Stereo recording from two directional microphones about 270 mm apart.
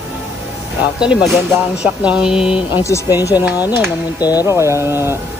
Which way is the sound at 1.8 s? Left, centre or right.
Centre.